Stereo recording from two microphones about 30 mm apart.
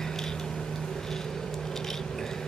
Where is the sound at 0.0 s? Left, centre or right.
Centre.